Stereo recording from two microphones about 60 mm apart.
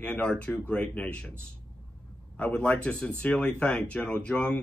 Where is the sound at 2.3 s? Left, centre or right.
Left.